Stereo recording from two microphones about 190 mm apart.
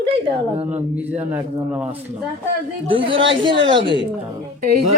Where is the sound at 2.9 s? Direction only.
25° right (ahead or behind).